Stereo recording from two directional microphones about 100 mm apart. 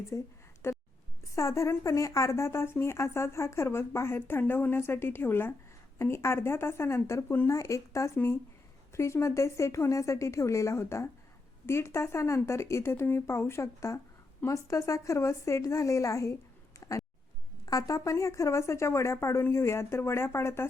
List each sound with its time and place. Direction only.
0.1 s a woman's voice: 30° left (ahead or behind)
17.7 s speech: 35° left (ahead or behind)